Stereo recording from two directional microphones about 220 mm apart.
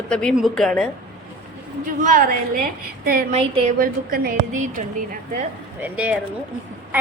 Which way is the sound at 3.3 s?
25° right (ahead or behind).